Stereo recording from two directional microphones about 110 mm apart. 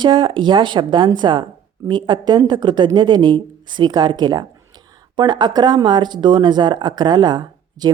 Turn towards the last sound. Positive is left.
turn(degrees=-40)  # may be behind; listen again after turning